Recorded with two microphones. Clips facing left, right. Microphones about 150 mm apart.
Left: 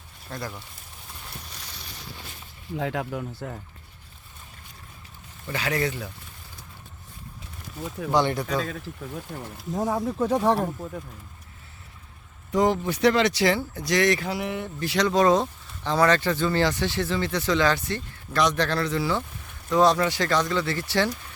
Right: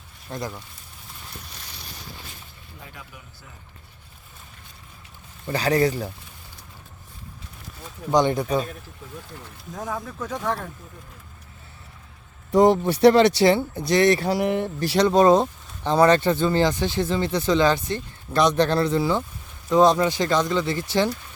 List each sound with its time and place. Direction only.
0.3 s speech: 20° right (ahead or behind)
2.7 s speech: 90° left; by 3.6 s 65° left (ahead or behind)
5.5 s speech: 35° right (ahead or behind)
8.1 s speech: 20° right (ahead or behind)
9.7 s speech: 25° left (ahead or behind)
12.5 s a sound: 35° right (ahead or behind)
12.8 s speech: 30° right (ahead or behind)